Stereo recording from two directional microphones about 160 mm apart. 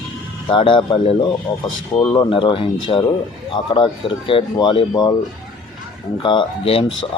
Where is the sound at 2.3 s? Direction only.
35° left (ahead or behind).